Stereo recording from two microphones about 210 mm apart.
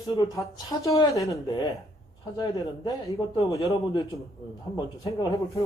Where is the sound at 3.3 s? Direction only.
25° left (ahead or behind).